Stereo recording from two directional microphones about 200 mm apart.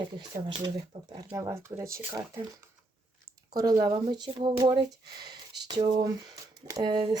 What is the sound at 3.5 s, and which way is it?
Speech, 20° right (ahead or behind).